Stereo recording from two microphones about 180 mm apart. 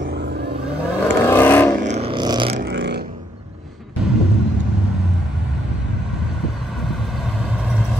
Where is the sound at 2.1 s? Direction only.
25° right (ahead or behind).